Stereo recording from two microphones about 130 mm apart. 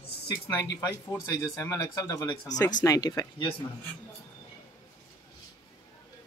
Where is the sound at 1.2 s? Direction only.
25° left (ahead or behind).